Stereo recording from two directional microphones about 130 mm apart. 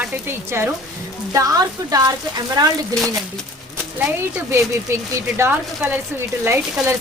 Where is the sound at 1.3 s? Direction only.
25° right (ahead or behind).